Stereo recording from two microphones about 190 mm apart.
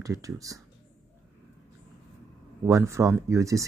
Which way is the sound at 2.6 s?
15° right (ahead or behind).